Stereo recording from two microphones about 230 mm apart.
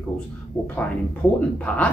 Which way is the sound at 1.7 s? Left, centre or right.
Centre.